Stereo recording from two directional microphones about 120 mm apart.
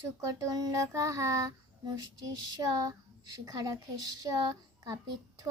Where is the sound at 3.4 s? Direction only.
30° right (ahead or behind).